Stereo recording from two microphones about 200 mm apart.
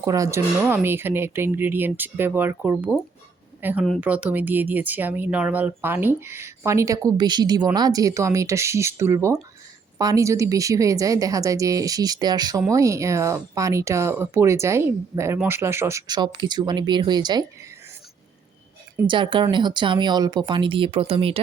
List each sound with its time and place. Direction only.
0.0 s speech: 15° right (ahead or behind)
19.0 s speech: 25° right (ahead or behind)